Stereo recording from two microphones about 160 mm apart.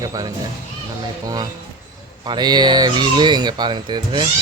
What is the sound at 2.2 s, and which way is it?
Speech, 25° right (ahead or behind).